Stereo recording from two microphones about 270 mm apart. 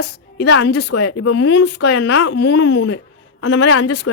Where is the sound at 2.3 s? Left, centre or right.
Left.